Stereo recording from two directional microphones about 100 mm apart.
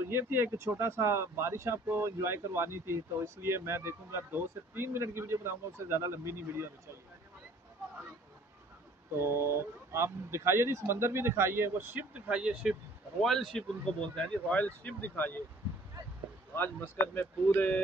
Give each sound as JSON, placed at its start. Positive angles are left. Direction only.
{"t": 0.1, "sound": "speech", "side_deg": -20}
{"t": 9.1, "sound": "speech", "side_deg": -25}
{"t": 13.2, "sound": "speech", "side_deg": 0}
{"t": 14.1, "sound": "speech", "side_deg": 15}
{"t": 16.5, "sound": "speech", "side_deg": 20}